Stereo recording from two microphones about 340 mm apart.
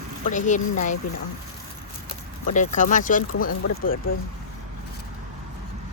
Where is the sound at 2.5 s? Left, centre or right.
Left.